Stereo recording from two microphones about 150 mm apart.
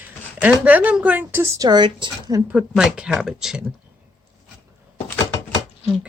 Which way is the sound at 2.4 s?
10° right (ahead or behind).